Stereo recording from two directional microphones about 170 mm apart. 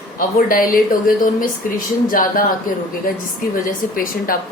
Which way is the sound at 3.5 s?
55° left (ahead or behind).